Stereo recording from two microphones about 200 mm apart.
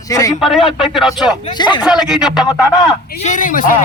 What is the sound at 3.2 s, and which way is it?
Speech, 40° left (ahead or behind).